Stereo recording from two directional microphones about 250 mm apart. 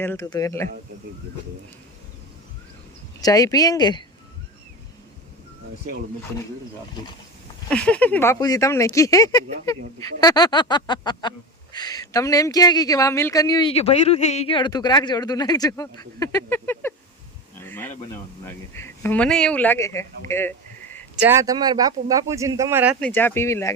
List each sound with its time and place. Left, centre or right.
0.0 s speech: centre
3.2 s speech: centre
7.7 s speech: centre
17.6 s a sound: centre
18.4 s speech: centre
21.2 s speech: centre